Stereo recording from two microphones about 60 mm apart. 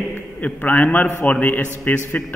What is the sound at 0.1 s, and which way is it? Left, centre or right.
A man's voice, left.